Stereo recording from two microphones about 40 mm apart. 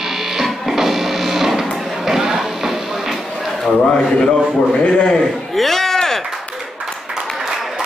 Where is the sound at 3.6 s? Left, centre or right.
Left.